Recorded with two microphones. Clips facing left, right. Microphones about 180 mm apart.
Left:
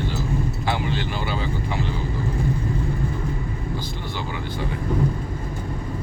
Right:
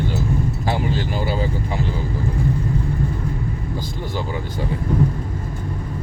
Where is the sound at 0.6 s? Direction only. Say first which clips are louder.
Right 3 dB; 40° right (ahead or behind).